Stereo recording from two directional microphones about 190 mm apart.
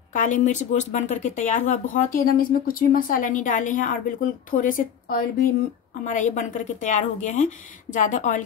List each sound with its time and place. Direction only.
0.1 s speech: 40° left (ahead or behind)